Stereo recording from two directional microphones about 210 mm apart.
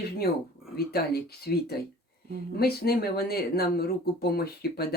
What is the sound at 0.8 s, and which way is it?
Speech, 45° left (ahead or behind).